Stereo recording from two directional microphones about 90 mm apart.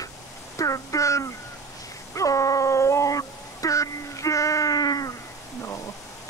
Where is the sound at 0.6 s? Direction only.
40° left (ahead or behind).